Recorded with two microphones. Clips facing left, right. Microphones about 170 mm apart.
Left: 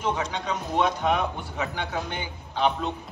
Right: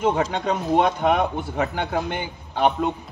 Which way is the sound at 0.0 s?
50° right (ahead or behind).